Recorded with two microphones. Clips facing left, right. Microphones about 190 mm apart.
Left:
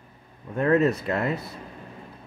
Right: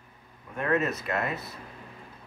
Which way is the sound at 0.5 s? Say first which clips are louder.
Left 7 dB; 35° left (ahead or behind).